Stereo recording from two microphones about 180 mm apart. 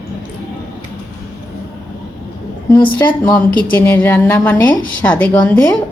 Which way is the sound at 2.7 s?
25° left (ahead or behind).